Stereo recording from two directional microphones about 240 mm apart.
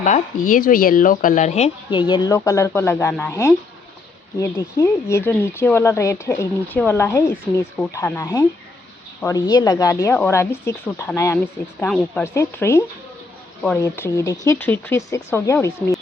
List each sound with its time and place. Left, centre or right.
0.0 s speech: left; by 16.0 s centre